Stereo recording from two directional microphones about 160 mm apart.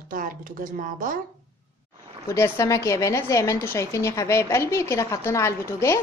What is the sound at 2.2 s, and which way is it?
A woman's voice, 15° left (ahead or behind).